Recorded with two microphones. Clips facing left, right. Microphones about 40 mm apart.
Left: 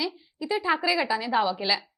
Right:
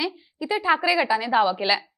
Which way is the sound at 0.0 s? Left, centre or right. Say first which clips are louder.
Right 3 dB; right.